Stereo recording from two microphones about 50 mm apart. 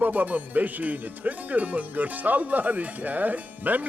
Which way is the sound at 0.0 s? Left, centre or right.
Right.